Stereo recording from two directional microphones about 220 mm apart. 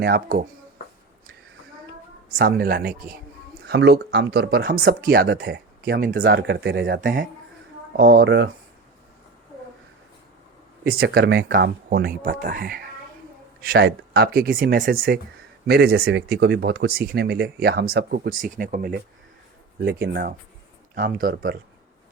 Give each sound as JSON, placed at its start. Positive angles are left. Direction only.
{"t": 0.0, "sound": "speech", "side_deg": -40}
{"t": 2.3, "sound": "speech", "side_deg": -45}
{"t": 10.9, "sound": "speech", "side_deg": -45}